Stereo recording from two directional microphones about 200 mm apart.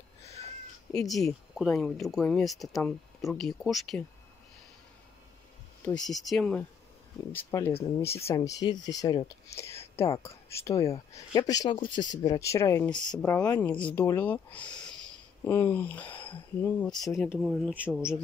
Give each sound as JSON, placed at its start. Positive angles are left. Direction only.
{"t": 0.9, "sound": "speech", "side_deg": 0}
{"t": 5.9, "sound": "speech", "side_deg": 5}